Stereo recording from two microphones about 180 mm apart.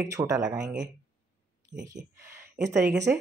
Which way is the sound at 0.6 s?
5° right (ahead or behind).